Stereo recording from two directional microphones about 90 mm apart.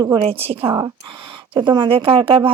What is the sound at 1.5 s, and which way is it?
Speech, 60° right (ahead or behind).